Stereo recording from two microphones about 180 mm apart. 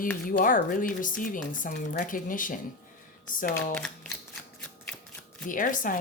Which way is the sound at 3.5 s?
5° left (ahead or behind).